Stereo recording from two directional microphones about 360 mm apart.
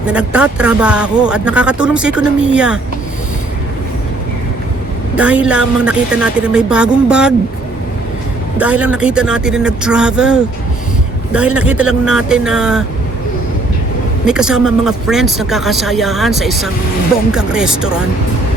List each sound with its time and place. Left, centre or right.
0.0 s speech: centre
5.1 s speech: centre
8.5 s speech: centre
14.3 s speech: centre